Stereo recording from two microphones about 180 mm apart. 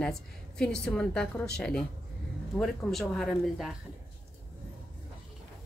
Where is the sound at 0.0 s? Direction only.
5° left (ahead or behind).